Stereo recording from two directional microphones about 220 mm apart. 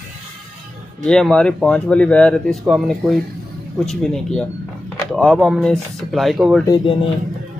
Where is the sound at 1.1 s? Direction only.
5° left (ahead or behind).